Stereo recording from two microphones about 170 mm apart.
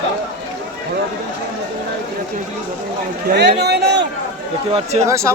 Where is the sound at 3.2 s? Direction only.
80° right.